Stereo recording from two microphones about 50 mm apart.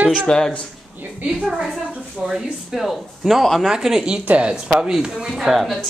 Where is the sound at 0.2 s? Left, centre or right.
Centre.